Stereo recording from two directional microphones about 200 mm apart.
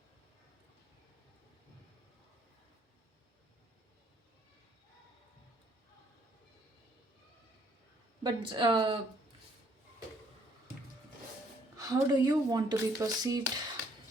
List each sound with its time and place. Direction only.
8.2 s speech: 25° right (ahead or behind)
11.8 s speech: 20° right (ahead or behind)